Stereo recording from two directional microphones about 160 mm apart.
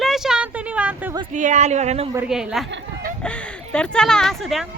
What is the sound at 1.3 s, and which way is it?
Speech, 50° right (ahead or behind).